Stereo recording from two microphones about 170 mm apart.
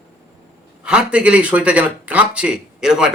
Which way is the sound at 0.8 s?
5° right (ahead or behind).